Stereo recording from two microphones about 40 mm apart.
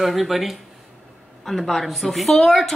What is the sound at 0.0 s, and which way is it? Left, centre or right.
A woman's voice, centre.